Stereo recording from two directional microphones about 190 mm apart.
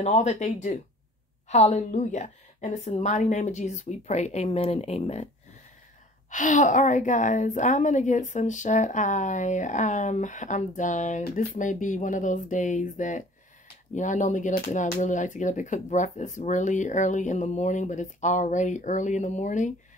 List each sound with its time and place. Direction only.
0.0 s a woman's voice: 35° left (ahead or behind)
6.3 s a woman's voice: 40° left (ahead or behind)